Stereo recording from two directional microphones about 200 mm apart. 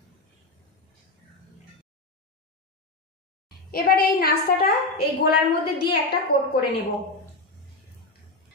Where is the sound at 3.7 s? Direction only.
50° left (ahead or behind).